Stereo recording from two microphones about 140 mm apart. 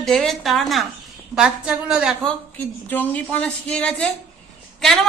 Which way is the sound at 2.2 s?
10° left (ahead or behind).